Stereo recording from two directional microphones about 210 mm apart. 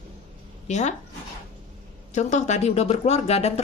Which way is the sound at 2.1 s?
35° left (ahead or behind).